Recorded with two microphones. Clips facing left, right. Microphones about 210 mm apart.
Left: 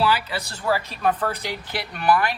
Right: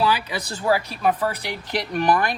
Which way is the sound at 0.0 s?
15° right (ahead or behind).